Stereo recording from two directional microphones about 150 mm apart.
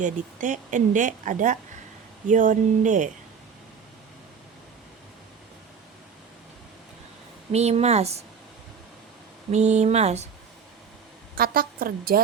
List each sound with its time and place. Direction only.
0.0 s a woman's voice: 55° right (ahead or behind)
7.5 s speech: 45° right (ahead or behind)
9.5 s speech: 50° right (ahead or behind)
11.3 s a woman's voice: 80° right